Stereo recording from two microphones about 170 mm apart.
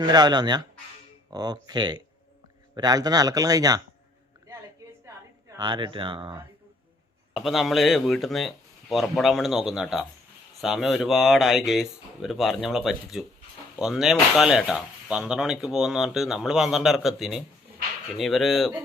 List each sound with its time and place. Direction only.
0.0 s a man's voice: 25° right (ahead or behind)
5.5 s a man's voice: 25° right (ahead or behind)
7.3 s speech: centre (ahead or behind)